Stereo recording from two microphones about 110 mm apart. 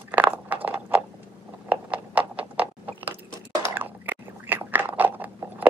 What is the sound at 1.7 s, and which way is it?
Biting, 10° right (ahead or behind).